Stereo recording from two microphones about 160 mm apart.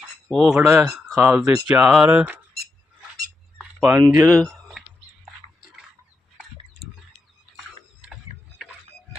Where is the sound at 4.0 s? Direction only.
20° right (ahead or behind).